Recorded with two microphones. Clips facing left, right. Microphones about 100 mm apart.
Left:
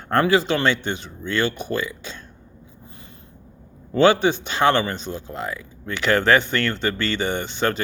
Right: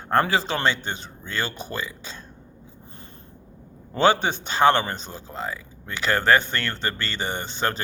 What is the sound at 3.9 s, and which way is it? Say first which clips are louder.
Speech: left 4 dB; 40° right (ahead or behind).